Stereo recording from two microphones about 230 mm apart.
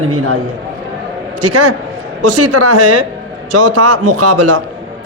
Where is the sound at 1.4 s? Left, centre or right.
Right.